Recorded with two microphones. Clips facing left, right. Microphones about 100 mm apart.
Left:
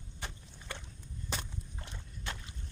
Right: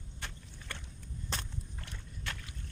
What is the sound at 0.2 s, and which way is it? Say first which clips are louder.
Vehicle: left 1 dB; 15° left (ahead or behind).